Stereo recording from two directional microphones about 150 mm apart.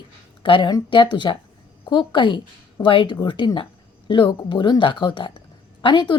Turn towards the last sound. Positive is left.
turn(degrees=30)  # may be behind; listen again after turning